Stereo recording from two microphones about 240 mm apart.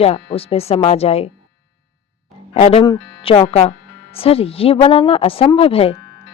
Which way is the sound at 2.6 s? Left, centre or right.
Left.